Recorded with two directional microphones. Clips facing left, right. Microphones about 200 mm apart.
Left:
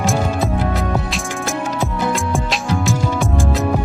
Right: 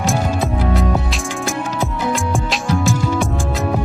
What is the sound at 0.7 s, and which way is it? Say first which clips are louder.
Music: right 2 dB; centre (ahead or behind).